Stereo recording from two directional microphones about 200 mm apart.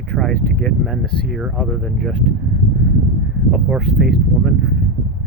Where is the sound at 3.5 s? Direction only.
Centre (ahead or behind).